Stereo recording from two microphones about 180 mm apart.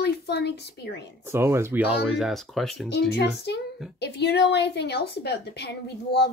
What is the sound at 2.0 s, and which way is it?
Speech, centre (ahead or behind).